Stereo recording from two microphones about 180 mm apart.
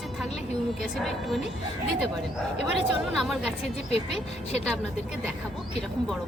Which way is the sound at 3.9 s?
35° left (ahead or behind).